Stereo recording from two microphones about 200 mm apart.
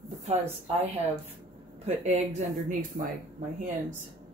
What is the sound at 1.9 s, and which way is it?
Speech, 35° right (ahead or behind).